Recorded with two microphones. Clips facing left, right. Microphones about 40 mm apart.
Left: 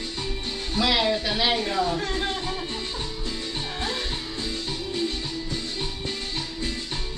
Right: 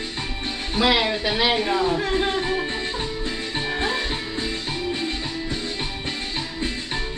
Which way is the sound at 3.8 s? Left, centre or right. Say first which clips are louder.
Right 4 dB; right.